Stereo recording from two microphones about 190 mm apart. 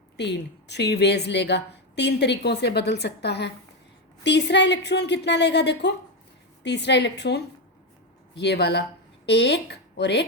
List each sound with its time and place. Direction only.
0.2 s a woman's voice: 65° left (ahead or behind)